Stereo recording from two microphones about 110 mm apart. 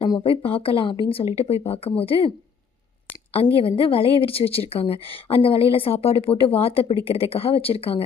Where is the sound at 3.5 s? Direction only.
55° left (ahead or behind).